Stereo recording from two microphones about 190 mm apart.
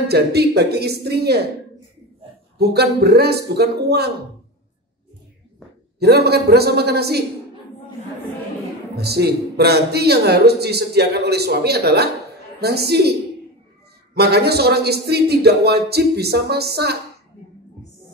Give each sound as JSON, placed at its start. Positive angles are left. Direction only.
{"t": 0.1, "sound": "speech", "side_deg": -60}
{"t": 2.6, "sound": "speech", "side_deg": -60}
{"t": 5.9, "sound": "speech", "side_deg": -60}
{"t": 8.9, "sound": "speech", "side_deg": -60}
{"t": 14.1, "sound": "speech", "side_deg": -60}